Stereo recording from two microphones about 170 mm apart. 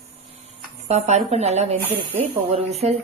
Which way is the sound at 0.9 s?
40° right (ahead or behind).